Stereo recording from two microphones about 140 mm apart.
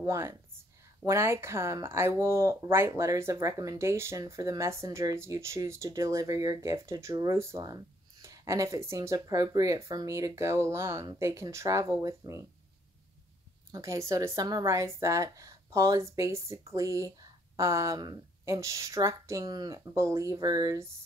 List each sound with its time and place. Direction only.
0.0 s speech: 20° right (ahead or behind)
13.7 s speech: 20° right (ahead or behind)